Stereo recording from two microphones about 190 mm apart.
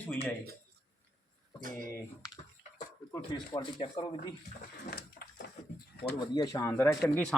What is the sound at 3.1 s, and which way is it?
Speech, 25° left (ahead or behind).